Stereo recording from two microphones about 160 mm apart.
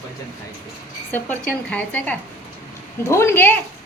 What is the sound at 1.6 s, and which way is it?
A woman's voice, 10° left (ahead or behind).